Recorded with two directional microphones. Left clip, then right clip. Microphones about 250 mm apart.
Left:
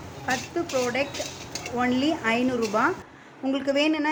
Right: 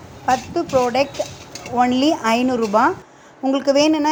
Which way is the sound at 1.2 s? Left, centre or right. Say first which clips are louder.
Right 6 dB; centre.